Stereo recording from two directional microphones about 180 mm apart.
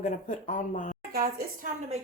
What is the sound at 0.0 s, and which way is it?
Speech, 45° left (ahead or behind).